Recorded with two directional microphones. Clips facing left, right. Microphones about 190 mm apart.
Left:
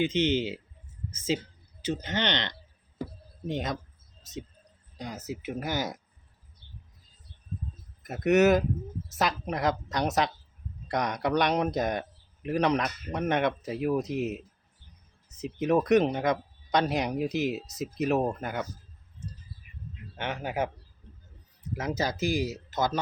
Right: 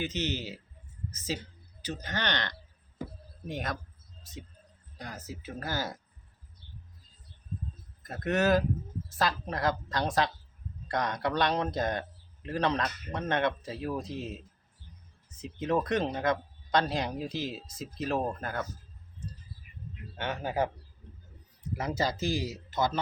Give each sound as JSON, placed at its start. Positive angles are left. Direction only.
{"t": 0.0, "sound": "speech", "side_deg": 25}
{"t": 4.9, "sound": "speech", "side_deg": 20}
{"t": 8.1, "sound": "a man's voice", "side_deg": 20}
{"t": 20.1, "sound": "a man's voice", "side_deg": 15}
{"t": 21.8, "sound": "a man's voice", "side_deg": 15}